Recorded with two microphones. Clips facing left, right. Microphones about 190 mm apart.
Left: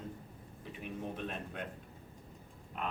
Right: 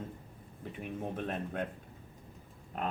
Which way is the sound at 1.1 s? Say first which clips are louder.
Right 5 dB; 50° right (ahead or behind).